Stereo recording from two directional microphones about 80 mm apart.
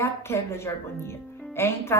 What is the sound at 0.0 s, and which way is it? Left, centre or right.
A woman's voice, left.